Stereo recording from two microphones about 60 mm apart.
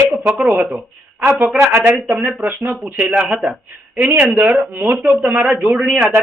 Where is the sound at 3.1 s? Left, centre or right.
Centre.